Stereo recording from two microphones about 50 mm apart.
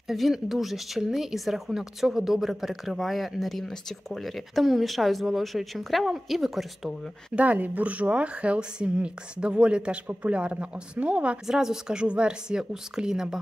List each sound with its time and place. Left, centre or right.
0.1 s speech: centre
7.3 s a woman's voice: right
11.4 s a woman's voice: centre